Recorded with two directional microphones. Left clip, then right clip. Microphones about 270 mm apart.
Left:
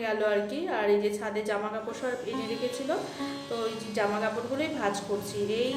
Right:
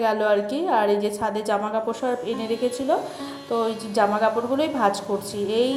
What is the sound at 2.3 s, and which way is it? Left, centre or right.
Music, centre.